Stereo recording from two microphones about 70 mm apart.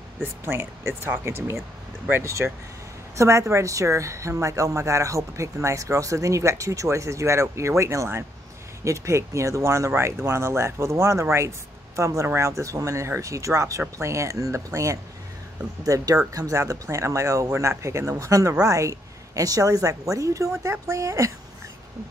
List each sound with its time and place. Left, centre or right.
0.2 s a woman's voice: right